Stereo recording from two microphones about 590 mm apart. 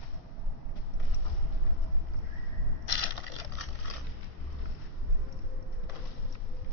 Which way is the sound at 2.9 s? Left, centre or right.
Left.